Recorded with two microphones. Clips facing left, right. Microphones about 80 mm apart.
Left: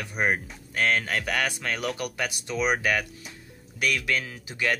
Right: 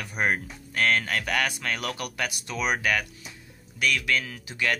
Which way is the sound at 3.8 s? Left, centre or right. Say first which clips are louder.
Right 1 dB; left.